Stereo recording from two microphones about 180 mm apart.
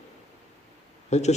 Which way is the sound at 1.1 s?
40° left (ahead or behind).